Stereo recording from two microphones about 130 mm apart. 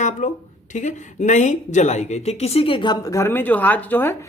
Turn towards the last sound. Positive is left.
turn(degrees=15)  # may be behind; listen again after turning